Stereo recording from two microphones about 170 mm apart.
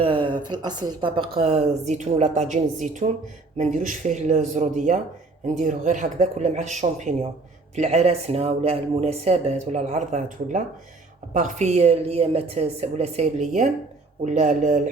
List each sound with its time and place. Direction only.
0.0 s speech: 30° right (ahead or behind); by 14.8 s 50° right (ahead or behind)